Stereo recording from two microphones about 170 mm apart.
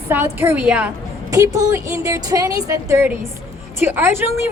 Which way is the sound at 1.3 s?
20° right (ahead or behind).